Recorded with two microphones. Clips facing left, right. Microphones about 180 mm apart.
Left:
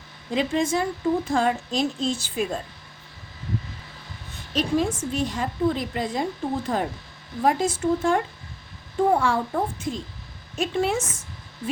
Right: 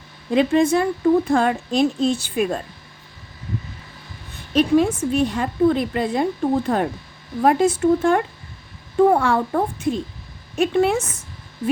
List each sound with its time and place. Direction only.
0.3 s a woman's voice: 60° right (ahead or behind)
4.5 s a woman's voice: 60° right (ahead or behind)